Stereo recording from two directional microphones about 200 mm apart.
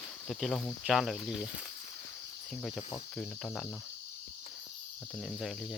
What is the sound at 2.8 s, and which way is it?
Cricket, 30° left (ahead or behind).